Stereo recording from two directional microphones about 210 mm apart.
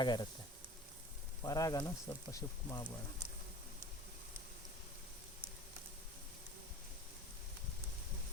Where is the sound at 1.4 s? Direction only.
15° left (ahead or behind).